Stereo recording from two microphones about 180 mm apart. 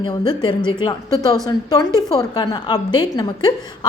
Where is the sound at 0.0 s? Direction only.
25° left (ahead or behind).